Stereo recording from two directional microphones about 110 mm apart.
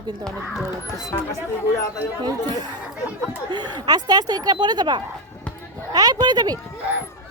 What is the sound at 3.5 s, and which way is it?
Speech, 40° right (ahead or behind).